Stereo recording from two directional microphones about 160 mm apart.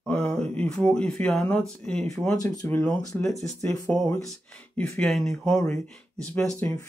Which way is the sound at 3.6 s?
15° left (ahead or behind).